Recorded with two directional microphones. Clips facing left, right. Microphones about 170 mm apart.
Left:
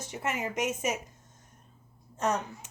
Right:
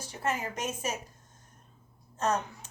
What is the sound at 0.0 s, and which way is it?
Speech, 20° left (ahead or behind).